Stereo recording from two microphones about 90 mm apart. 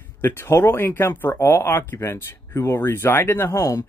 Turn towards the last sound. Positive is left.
turn(degrees=40)  # may be behind; listen again after turning